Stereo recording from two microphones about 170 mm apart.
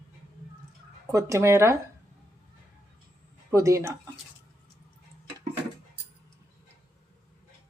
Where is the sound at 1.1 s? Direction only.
15° right (ahead or behind).